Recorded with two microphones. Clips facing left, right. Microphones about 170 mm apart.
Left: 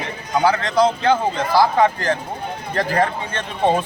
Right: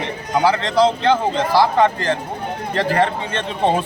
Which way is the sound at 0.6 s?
25° right (ahead or behind).